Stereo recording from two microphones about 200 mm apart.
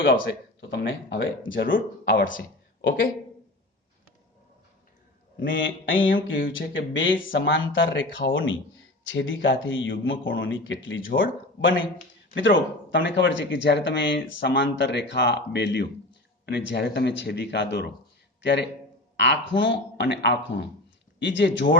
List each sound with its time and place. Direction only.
0.2 s speech: 60° left (ahead or behind)
1.6 s speech: 45° left (ahead or behind)
5.5 s speech: 70° left (ahead or behind)
7.2 s speech: 45° left (ahead or behind)
7.4 s speech: 70° left (ahead or behind)